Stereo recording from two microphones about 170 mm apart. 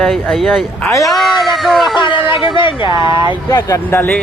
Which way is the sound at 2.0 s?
30° left (ahead or behind).